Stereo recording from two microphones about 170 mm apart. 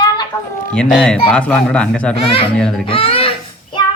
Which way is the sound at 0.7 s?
5° left (ahead or behind).